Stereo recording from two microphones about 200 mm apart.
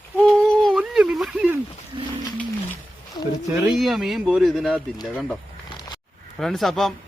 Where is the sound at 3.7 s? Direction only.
Centre (ahead or behind).